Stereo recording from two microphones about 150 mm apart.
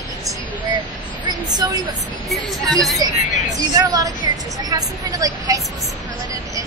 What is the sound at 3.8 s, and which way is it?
Speech, 25° right (ahead or behind).